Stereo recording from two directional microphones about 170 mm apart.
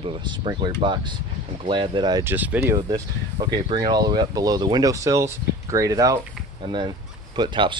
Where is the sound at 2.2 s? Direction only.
10° right (ahead or behind).